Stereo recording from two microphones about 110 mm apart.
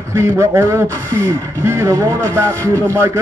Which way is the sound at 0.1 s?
25° right (ahead or behind).